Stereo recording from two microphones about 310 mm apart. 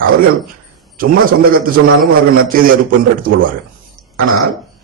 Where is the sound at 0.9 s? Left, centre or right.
Right.